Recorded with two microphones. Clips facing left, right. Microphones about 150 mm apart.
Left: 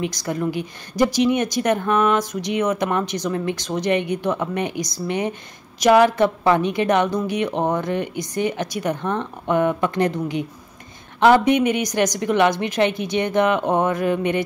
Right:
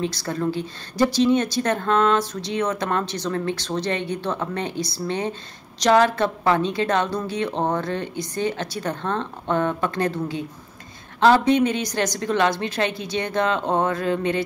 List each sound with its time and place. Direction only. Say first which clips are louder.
0.0 s a woman's voice: left 1 dB; 15° left (ahead or behind)